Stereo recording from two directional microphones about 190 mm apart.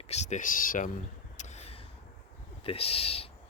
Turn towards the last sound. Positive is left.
turn(degrees=30)  # may be behind; listen again after turning